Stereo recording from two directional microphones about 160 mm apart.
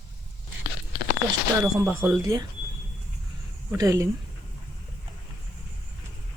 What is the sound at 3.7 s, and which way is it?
Speech, 20° right (ahead or behind).